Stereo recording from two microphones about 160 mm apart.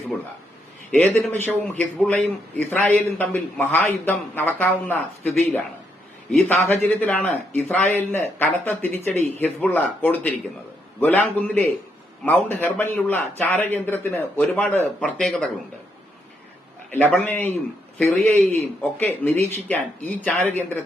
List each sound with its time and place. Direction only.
0.9 s a man's voice: 10° left (ahead or behind)
16.9 s a man's voice: 10° left (ahead or behind)